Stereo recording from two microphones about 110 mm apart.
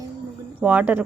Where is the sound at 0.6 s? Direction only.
15° right (ahead or behind).